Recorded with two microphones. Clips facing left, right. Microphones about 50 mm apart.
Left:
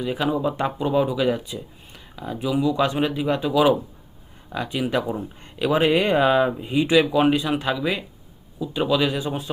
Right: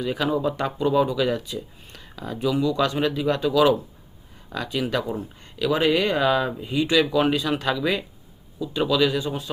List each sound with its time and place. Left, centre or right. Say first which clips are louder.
0.0 s speech: even; centre